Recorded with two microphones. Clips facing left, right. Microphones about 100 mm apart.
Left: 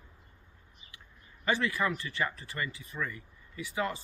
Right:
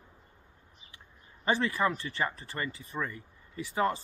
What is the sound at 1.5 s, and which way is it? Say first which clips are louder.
Speech: right 2 dB; 30° right (ahead or behind).